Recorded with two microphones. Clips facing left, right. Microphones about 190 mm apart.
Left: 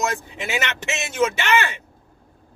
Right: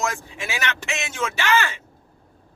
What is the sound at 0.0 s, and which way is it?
Speech, 20° left (ahead or behind).